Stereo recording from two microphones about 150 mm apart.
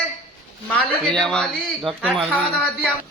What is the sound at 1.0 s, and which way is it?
Speech, 5° left (ahead or behind).